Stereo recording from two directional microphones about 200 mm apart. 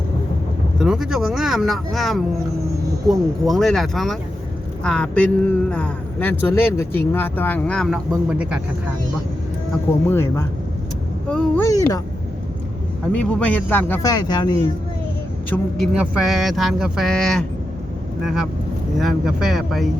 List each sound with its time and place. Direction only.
0.8 s speech: 5° right (ahead or behind)
10.1 s speech: 10° left (ahead or behind)
11.6 s speech: 15° left (ahead or behind)
13.1 s speech: 10° left (ahead or behind)
15.4 s speech: 5° left (ahead or behind)